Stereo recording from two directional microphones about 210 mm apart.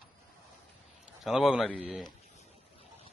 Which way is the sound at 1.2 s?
Centre (ahead or behind).